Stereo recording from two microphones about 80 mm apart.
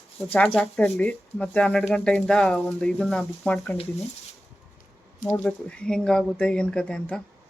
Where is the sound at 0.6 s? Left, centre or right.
Centre.